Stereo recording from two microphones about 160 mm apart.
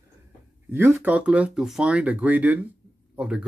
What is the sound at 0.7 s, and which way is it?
Speech, 10° right (ahead or behind).